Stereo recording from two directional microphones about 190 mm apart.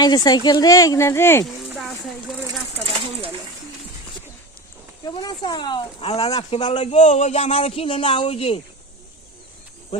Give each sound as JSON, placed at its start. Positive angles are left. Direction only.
{"t": 0.0, "sound": "speech", "side_deg": 20}
{"t": 1.7, "sound": "a sound", "side_deg": 0}
{"t": 5.0, "sound": "speech", "side_deg": 20}